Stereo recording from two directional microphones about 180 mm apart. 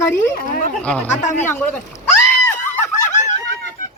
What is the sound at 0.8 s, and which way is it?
Speech, 5° left (ahead or behind).